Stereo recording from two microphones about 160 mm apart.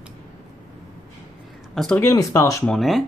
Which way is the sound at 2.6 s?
Centre (ahead or behind).